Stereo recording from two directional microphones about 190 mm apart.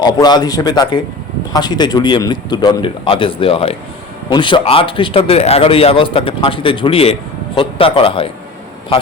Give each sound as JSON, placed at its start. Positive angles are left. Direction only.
{"t": 0.0, "sound": "a man's voice", "side_deg": 20}